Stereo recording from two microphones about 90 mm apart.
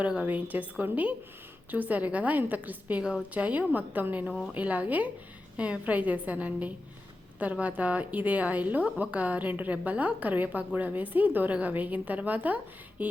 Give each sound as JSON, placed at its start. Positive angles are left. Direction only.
{"t": 0.0, "sound": "a woman's voice", "side_deg": -15}
{"t": 4.3, "sound": "a woman's voice", "side_deg": 0}
{"t": 4.5, "sound": "a woman's voice", "side_deg": -15}
{"t": 13.0, "sound": "music", "side_deg": -20}